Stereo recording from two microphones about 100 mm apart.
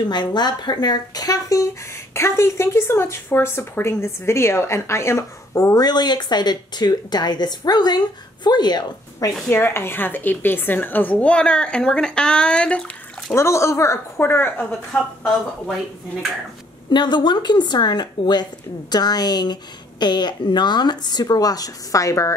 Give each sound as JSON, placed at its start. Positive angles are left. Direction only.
{"t": 0.1, "sound": "speech", "side_deg": 45}
{"t": 9.5, "sound": "a woman's voice", "side_deg": 20}
{"t": 13.3, "sound": "speech", "side_deg": 30}
{"t": 16.9, "sound": "speech", "side_deg": 50}